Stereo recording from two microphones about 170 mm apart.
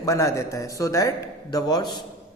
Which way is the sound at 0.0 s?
20° left (ahead or behind).